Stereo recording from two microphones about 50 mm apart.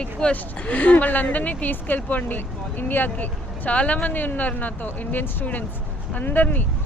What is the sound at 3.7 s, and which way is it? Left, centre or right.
Speech, left.